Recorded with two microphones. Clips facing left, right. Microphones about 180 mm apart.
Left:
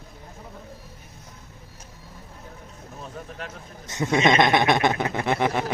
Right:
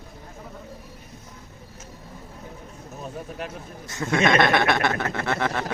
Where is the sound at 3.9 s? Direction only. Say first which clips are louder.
Left 1 dB; 20° left (ahead or behind).